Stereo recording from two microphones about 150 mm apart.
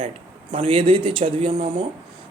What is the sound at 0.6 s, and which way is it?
Speech, 40° right (ahead or behind).